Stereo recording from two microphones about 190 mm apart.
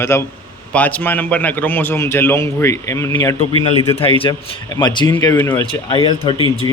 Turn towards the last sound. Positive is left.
turn(degrees=25)  # may be behind; listen again after turning